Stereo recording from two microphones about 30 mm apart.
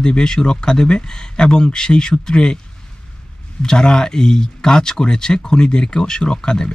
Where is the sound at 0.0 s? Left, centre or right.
Left.